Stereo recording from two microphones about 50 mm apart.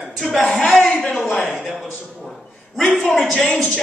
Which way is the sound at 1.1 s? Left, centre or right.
Centre.